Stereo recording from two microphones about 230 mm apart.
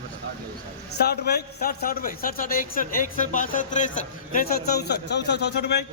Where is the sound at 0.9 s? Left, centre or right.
Left.